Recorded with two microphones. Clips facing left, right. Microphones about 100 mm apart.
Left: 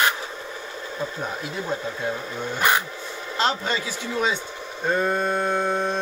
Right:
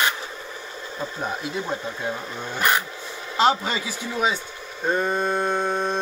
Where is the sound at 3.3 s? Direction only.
15° right (ahead or behind).